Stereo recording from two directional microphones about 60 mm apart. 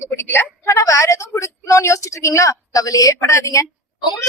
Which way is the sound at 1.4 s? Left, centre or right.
Left.